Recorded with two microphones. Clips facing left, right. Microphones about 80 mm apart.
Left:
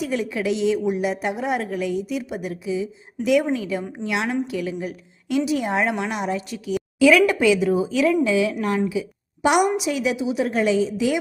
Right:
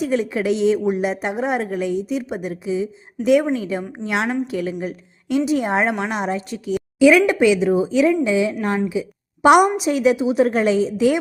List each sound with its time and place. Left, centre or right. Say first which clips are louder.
0.0 s a woman's voice: right 4 dB; right
9.4 s a woman's voice: right 6 dB; right
9.7 s a woman's voice: right 5 dB; right